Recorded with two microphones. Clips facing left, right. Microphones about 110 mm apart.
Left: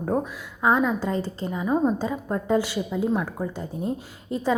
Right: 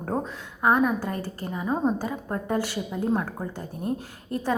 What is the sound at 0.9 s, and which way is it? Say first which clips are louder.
A woman's voice: left 4 dB; 20° left (ahead or behind).